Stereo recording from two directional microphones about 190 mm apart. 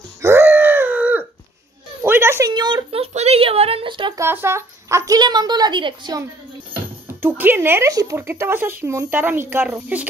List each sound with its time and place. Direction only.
0.2 s a sound: 15° right (ahead or behind)
2.0 s a woman's voice: 10° right (ahead or behind)
4.2 s a woman's voice: 15° right (ahead or behind)
7.2 s speech: 10° right (ahead or behind)